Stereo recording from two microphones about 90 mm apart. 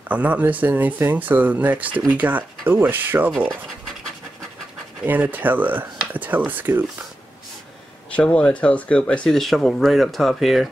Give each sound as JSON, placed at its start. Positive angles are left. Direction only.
{"t": 0.1, "sound": "speech", "side_deg": -15}
{"t": 5.2, "sound": "speech", "side_deg": -20}
{"t": 8.2, "sound": "speech", "side_deg": 10}